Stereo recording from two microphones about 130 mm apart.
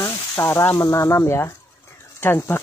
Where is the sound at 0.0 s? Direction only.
20° left (ahead or behind).